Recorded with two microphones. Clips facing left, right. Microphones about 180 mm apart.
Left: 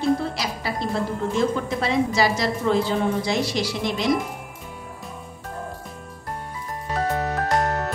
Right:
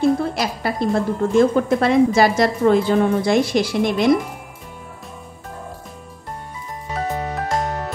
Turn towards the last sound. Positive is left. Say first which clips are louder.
# even
turn(degrees=0)  # may be behind; listen again after turning